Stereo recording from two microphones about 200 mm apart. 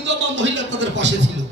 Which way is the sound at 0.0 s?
65° right (ahead or behind).